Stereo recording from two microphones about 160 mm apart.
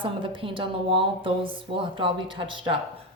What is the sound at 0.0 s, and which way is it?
A woman's voice, 30° right (ahead or behind).